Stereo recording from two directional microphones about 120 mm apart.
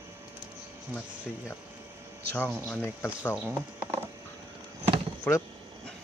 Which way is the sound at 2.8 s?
20° left (ahead or behind).